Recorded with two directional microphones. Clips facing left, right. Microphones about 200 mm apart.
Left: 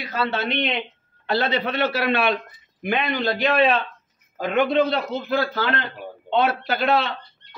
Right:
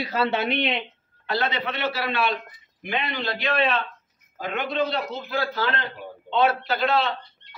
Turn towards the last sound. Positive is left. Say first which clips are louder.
# left 2 dB
turn(degrees=55)  # may be behind; listen again after turning